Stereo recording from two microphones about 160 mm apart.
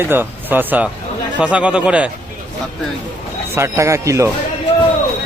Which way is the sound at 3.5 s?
15° right (ahead or behind).